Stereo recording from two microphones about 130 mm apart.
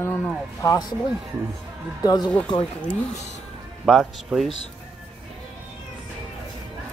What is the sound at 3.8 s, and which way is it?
Speech, centre (ahead or behind).